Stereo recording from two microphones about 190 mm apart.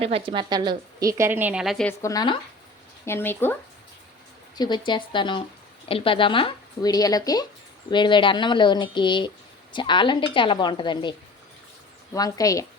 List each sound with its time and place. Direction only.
0.0 s a woman's voice: 30° right (ahead or behind); by 1.9 s centre (ahead or behind)
1.9 s speech: 15° left (ahead or behind)
3.1 s a woman's voice: 10° left (ahead or behind)
4.5 s speech: 20° left (ahead or behind)
12.1 s a woman's voice: 20° left (ahead or behind)